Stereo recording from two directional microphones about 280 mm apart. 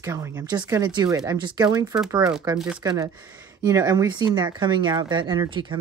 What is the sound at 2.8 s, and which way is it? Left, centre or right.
Speech, centre.